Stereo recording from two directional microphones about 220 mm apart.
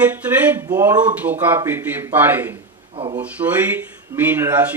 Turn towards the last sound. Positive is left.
turn(degrees=-10)  # may be behind; listen again after turning